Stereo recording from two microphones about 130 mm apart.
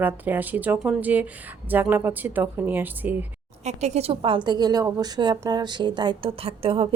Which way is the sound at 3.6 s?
60° right (ahead or behind).